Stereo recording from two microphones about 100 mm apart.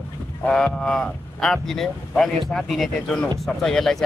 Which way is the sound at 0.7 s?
10° left (ahead or behind).